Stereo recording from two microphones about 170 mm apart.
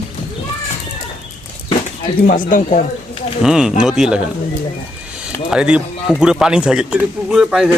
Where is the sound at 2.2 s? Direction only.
50° left (ahead or behind).